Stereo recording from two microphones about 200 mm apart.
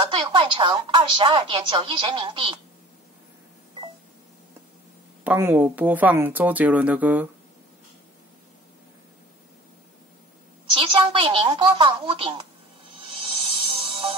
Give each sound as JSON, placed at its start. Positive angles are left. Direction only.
{"t": 0.0, "sound": "speech", "side_deg": -25}
{"t": 5.2, "sound": "speech", "side_deg": -10}
{"t": 10.7, "sound": "speech", "side_deg": -25}
{"t": 13.1, "sound": "music", "side_deg": -25}